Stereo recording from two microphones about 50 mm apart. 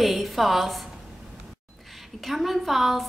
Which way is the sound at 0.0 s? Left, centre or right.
Centre.